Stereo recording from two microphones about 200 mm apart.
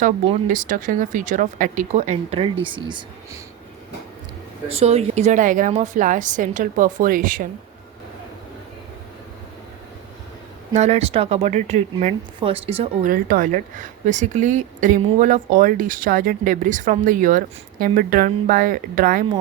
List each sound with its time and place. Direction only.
0.4 s speech: 40° right (ahead or behind); by 3.4 s 25° right (ahead or behind)
4.7 s speech: 30° right (ahead or behind)
10.8 s speech: 35° right (ahead or behind)